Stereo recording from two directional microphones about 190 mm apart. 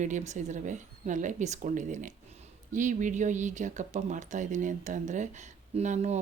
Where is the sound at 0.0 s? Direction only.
40° right (ahead or behind).